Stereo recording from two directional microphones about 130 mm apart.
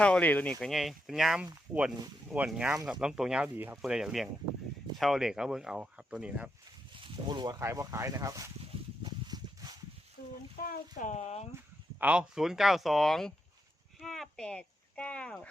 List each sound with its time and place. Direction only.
0.0 s speech: 10° left (ahead or behind)
0.7 s speech: centre (ahead or behind)
2.5 s speech: 5° right (ahead or behind)
3.8 s speech: 5° right (ahead or behind)
6.9 s a sound: 40° right (ahead or behind)
7.6 s speech: 20° right (ahead or behind)
9.0 s a sound: 30° right (ahead or behind)
10.6 s speech: 85° left; by 11.4 s 55° left (ahead or behind)
11.9 s speech: 10° right (ahead or behind); by 15.4 s 10° left (ahead or behind)